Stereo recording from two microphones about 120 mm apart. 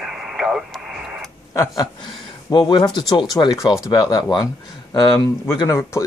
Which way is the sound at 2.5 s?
40° left (ahead or behind).